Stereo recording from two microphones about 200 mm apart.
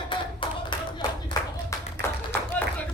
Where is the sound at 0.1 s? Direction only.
25° left (ahead or behind).